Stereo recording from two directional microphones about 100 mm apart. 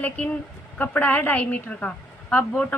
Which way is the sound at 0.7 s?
15° left (ahead or behind).